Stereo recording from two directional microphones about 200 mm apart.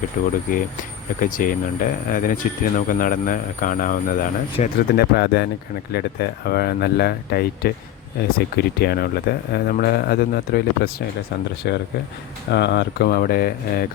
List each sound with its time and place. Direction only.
0.2 s speech: 40° left (ahead or behind)
4.9 s speech: 55° left (ahead or behind)